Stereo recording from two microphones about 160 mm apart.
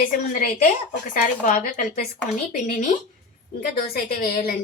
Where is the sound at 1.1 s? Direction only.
55° left (ahead or behind).